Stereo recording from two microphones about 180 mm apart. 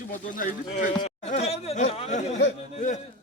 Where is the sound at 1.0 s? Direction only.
35° left (ahead or behind).